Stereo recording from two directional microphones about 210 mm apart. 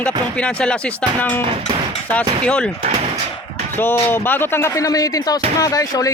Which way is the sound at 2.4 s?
5° left (ahead or behind).